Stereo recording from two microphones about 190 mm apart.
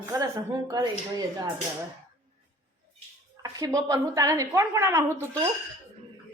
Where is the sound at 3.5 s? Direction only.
20° right (ahead or behind).